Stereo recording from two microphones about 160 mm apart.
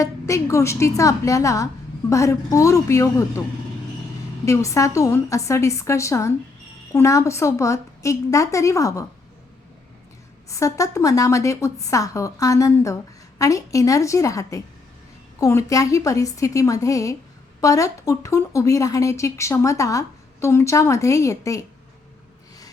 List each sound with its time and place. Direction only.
0.0 s speech: 20° left (ahead or behind)
4.4 s speech: 20° left (ahead or behind)
10.5 s speech: 20° left (ahead or behind)